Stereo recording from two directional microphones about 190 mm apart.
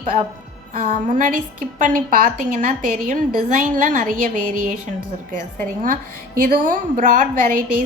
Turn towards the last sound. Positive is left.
turn(degrees=-45)  # may be behind; listen again after turning